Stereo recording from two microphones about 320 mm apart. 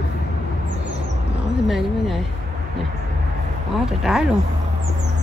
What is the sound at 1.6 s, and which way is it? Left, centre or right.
Speech, centre.